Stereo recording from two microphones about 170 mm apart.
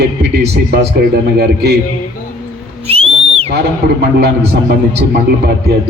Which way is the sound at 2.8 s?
35° right (ahead or behind).